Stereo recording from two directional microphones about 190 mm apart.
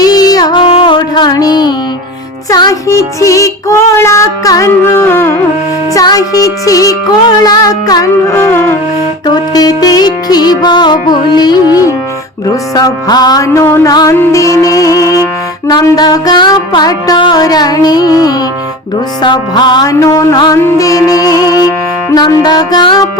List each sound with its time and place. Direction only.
0.0 s music: 20° left (ahead or behind)